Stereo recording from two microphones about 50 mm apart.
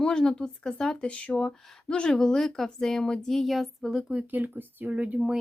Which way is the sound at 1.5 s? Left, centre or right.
Centre.